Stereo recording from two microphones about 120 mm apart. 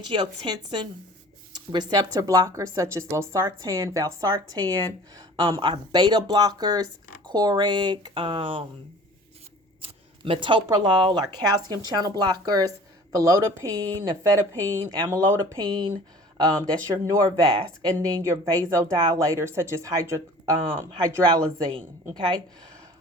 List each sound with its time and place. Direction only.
0.0 s speech: 40° right (ahead or behind)
5.4 s speech: 45° right (ahead or behind)
9.8 s speech: 50° right (ahead or behind); by 15.5 s 20° right (ahead or behind)
15.5 s speech: 40° right (ahead or behind)
17.1 s speech: 30° right (ahead or behind)
17.9 s speech: 20° right (ahead or behind); by 22.4 s 35° right (ahead or behind)